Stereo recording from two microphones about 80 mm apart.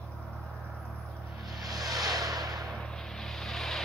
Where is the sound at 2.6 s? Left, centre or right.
Centre.